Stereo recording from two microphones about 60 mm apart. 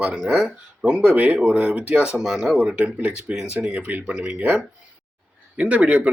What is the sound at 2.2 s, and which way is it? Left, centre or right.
Speech, centre.